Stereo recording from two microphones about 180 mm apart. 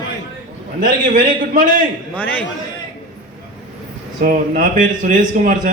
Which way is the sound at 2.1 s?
10° left (ahead or behind).